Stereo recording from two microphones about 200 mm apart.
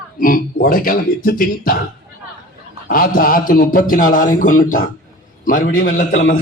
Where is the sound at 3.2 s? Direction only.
45° left (ahead or behind).